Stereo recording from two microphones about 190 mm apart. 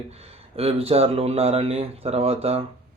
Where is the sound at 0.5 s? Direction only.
30° right (ahead or behind).